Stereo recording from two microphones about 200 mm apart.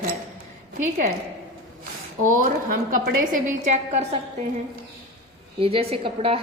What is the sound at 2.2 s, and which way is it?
A woman's voice, 40° right (ahead or behind).